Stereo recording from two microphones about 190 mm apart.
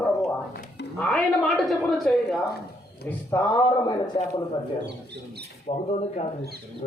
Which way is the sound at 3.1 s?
10° left (ahead or behind).